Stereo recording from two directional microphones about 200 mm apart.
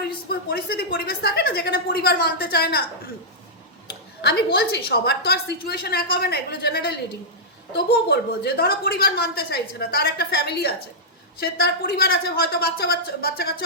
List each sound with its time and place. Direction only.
0.0 s a woman's voice: 50° left (ahead or behind)
4.2 s a woman's voice: 50° left (ahead or behind)